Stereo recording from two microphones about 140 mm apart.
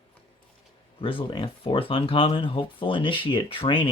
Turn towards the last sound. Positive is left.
turn(degrees=40)  # may be behind; listen again after turning